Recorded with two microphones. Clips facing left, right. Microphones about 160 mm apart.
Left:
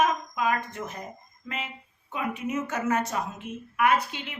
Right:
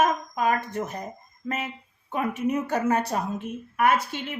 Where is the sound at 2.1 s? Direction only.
45° right (ahead or behind).